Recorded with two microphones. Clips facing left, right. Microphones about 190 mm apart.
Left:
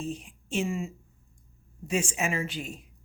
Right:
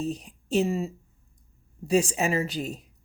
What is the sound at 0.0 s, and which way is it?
Speech, 40° right (ahead or behind).